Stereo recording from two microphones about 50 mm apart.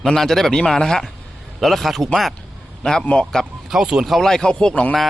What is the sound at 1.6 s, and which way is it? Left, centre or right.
Speech, centre.